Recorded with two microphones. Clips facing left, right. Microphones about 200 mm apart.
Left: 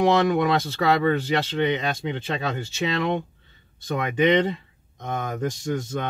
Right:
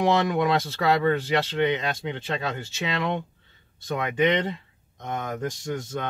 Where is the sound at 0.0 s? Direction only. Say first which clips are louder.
Left 3 dB; centre (ahead or behind).